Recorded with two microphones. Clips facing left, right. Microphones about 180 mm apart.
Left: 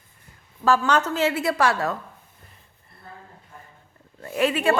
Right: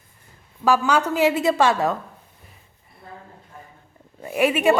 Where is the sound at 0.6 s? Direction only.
10° right (ahead or behind).